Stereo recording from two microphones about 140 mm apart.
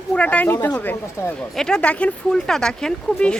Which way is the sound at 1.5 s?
5° left (ahead or behind).